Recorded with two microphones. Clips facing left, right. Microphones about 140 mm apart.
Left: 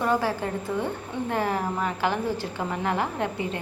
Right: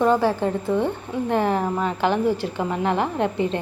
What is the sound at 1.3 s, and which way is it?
A woman's voice, 20° right (ahead or behind).